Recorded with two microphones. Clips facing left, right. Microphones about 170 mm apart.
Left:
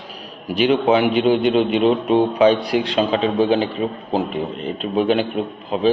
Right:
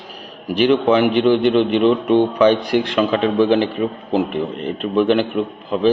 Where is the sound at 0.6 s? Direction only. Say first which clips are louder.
Right 2 dB; 50° right (ahead or behind).